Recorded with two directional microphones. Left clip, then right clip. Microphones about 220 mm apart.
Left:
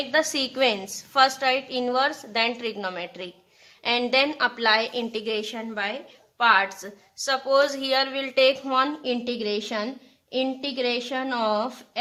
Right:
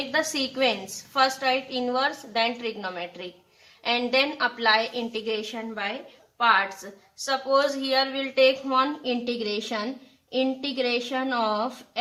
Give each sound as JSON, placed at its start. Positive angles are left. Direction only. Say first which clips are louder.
{"t": 0.1, "sound": "a woman's voice", "louder": "left 3 dB", "side_deg": 40}